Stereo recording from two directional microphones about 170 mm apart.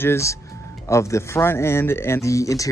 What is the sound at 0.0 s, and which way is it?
Speech, 15° left (ahead or behind).